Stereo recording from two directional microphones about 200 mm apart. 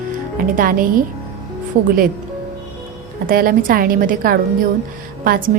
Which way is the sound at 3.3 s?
45° right (ahead or behind).